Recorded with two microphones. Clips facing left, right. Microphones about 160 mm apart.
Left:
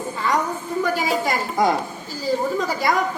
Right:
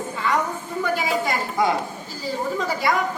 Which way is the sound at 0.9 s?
40° left (ahead or behind).